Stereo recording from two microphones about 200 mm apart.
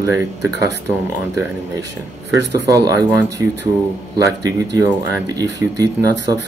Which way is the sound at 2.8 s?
15° right (ahead or behind).